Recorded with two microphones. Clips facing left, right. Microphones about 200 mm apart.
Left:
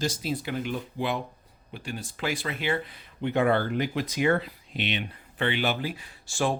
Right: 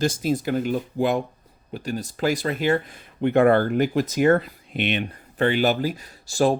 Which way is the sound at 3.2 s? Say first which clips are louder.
Right 7 dB; 55° right (ahead or behind).